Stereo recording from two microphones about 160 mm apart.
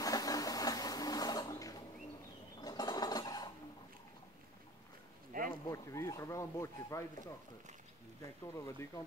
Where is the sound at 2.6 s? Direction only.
25° left (ahead or behind).